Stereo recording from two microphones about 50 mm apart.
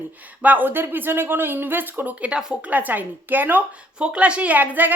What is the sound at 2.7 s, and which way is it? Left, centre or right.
Speech, right.